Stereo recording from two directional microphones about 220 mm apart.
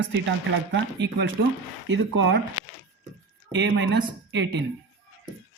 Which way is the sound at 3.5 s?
55° right (ahead or behind).